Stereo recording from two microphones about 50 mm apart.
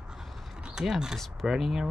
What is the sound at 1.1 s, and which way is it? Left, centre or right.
Speech, centre.